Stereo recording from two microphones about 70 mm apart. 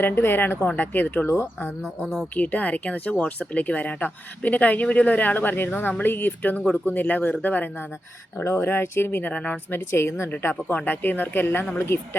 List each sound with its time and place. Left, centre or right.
0.0 s speech: left
1.3 s speech: left
2.3 s speech: left
9.3 s speech: centre
9.7 s speech: left
10.3 s speech: left